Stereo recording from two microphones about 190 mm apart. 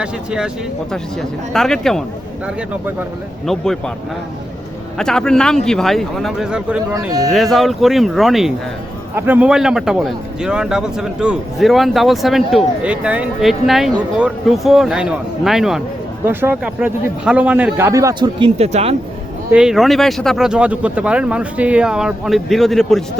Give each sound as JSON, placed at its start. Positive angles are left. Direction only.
{"t": 0.0, "sound": "speech", "side_deg": -5}
{"t": 1.5, "sound": "speech", "side_deg": 0}
{"t": 3.4, "sound": "speech", "side_deg": 0}
{"t": 4.9, "sound": "speech", "side_deg": 5}
{"t": 6.9, "sound": "speech", "side_deg": -20}
{"t": 7.3, "sound": "speech", "side_deg": 0}
{"t": 19.5, "sound": "speech", "side_deg": -5}